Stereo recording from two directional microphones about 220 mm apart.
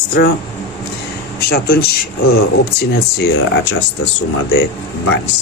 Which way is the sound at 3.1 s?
50° left (ahead or behind).